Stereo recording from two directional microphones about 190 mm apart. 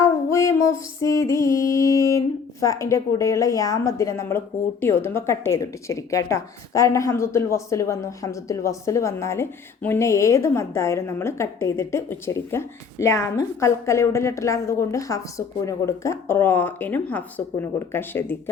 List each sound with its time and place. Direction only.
0.3 s music: 15° left (ahead or behind)
1.0 s speech: 15° left (ahead or behind)